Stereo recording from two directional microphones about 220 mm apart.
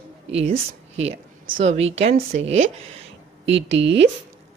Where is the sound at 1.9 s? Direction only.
30° right (ahead or behind).